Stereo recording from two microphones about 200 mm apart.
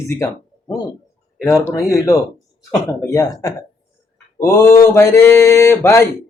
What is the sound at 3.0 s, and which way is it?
Speech, 15° left (ahead or behind).